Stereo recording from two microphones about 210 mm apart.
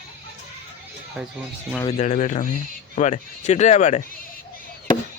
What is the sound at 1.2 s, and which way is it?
Speech, 5° right (ahead or behind).